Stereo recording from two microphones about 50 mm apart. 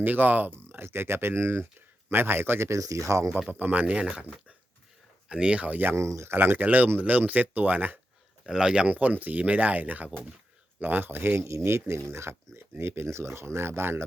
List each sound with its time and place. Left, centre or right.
0.0 s speech: right
3.5 s speech: right
5.3 s speech: right
6.0 s speech: right
6.3 s speech: right
8.4 s speech: centre
8.9 s speech: right
11.6 s speech: right